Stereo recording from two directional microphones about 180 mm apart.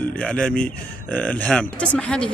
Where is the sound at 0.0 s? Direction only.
5° left (ahead or behind).